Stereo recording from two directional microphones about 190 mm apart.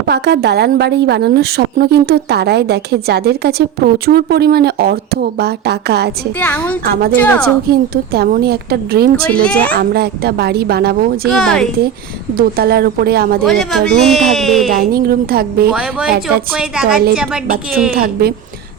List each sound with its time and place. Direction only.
0.1 s a woman's voice: 60° right (ahead or behind)
6.4 s a woman's voice: 10° left (ahead or behind)
6.8 s a woman's voice: 55° right (ahead or behind)
7.2 s a woman's voice: 10° left (ahead or behind)
7.7 s a woman's voice: 55° right (ahead or behind)
11.3 s speech: 5° left (ahead or behind)
12.3 s speech: 50° right (ahead or behind)
13.4 s speech: centre (ahead or behind)
14.7 s speech: 50° right (ahead or behind)
15.7 s speech: 5° right (ahead or behind)
17.9 s a woman's voice: 55° right (ahead or behind)